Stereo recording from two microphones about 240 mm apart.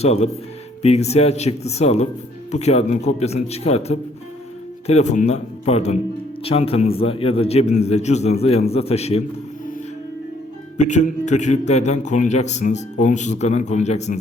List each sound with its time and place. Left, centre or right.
0.0 s a man's voice: left
10.8 s a man's voice: left